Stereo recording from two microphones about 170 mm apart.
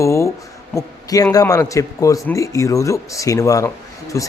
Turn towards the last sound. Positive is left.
turn(degrees=20)  # may be behind; listen again after turning